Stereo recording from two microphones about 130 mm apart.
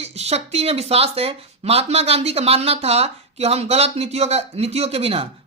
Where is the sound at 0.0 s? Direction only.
55° right (ahead or behind).